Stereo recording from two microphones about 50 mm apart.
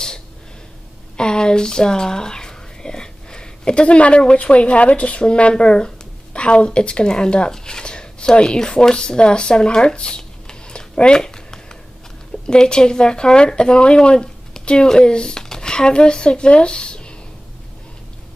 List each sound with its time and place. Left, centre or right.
1.1 s speech: centre